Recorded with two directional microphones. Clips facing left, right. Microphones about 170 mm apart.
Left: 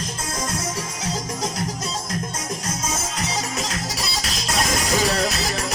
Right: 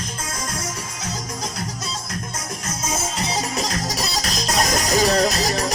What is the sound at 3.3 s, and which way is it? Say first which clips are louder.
Music: right 4 dB; 35° right (ahead or behind).